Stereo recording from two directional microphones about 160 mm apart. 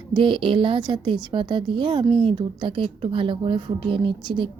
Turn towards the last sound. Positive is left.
turn(degrees=-30)  # may be behind; listen again after turning